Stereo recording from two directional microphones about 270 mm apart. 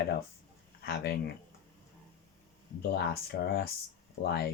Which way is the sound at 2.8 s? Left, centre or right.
Left.